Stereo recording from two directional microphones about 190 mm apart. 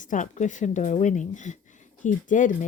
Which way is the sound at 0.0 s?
40° left (ahead or behind).